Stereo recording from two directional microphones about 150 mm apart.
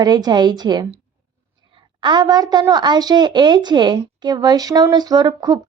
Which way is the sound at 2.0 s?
30° right (ahead or behind).